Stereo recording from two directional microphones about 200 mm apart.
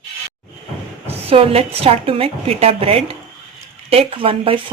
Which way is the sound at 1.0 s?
30° right (ahead or behind).